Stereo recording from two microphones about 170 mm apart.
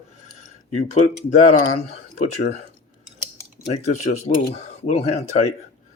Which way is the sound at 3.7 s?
45° left (ahead or behind).